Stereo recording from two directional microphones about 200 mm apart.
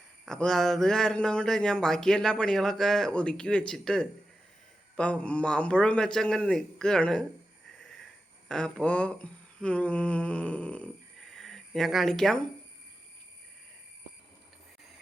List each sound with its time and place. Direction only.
0.3 s speech: 5° left (ahead or behind)
7.8 s wheeze: centre (ahead or behind)
8.4 s speech: 5° left (ahead or behind)